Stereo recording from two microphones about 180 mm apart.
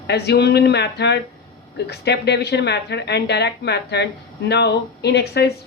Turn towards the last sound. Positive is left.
turn(degrees=65)  # may be behind; listen again after turning